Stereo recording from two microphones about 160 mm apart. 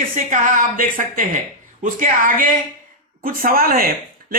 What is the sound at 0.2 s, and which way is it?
A woman's voice, 50° right (ahead or behind).